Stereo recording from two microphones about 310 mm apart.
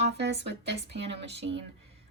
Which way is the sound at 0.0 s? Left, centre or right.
Right.